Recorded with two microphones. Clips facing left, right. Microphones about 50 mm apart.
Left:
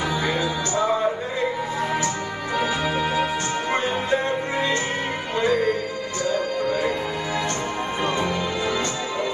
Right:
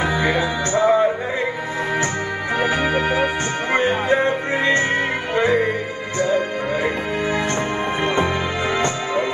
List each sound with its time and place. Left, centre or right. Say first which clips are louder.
0.0 s music: right 4 dB; right
2.5 s music: right 4 dB; right
8.0 s music: right 3 dB; right